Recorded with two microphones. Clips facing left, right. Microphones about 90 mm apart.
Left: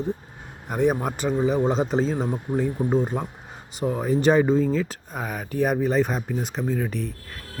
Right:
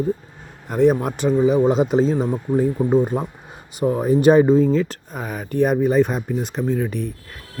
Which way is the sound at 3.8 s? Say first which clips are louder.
Right 6 dB; 25° right (ahead or behind).